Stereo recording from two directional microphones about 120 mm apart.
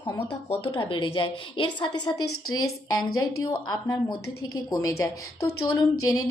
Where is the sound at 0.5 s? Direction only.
45° left (ahead or behind).